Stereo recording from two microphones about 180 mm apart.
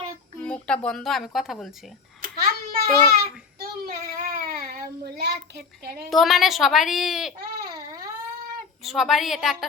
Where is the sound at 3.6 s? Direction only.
55° right (ahead or behind).